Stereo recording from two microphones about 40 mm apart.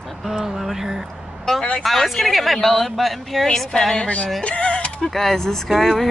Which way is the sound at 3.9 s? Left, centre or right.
Left.